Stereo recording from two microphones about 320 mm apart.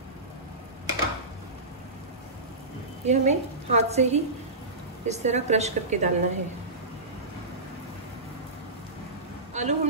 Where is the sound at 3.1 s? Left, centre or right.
Right.